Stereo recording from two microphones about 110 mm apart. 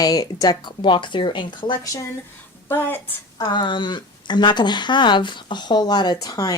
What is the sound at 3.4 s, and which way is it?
Speech, 45° left (ahead or behind).